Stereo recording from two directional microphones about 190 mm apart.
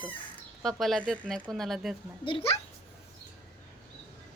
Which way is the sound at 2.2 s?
30° left (ahead or behind).